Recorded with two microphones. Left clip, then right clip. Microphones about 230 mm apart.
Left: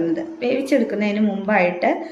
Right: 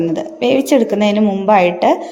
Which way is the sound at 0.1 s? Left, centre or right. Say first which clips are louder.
Right 7 dB; right.